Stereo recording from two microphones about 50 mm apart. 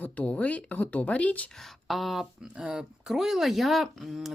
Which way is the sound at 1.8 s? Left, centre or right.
Centre.